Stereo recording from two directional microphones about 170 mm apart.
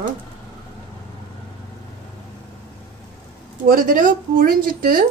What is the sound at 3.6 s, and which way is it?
Speech, 55° right (ahead or behind).